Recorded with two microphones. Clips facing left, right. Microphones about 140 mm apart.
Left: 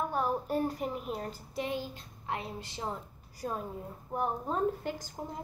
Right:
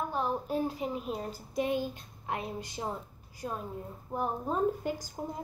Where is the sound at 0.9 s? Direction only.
25° right (ahead or behind).